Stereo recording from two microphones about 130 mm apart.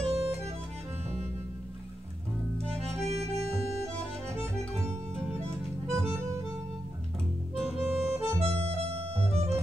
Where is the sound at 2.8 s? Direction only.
55° right (ahead or behind).